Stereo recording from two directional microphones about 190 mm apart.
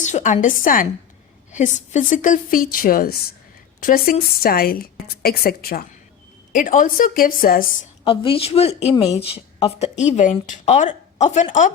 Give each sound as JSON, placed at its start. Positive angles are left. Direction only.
{"t": 0.0, "sound": "a woman's voice", "side_deg": 40}
{"t": 8.0, "sound": "a woman's voice", "side_deg": 30}